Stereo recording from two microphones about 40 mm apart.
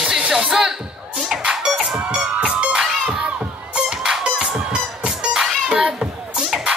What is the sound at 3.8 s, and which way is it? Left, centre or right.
Music, centre.